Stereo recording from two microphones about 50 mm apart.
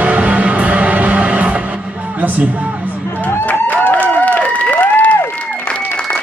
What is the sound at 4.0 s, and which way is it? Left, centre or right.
Applause, left.